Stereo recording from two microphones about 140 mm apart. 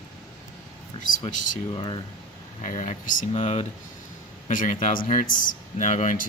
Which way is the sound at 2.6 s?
60° left (ahead or behind).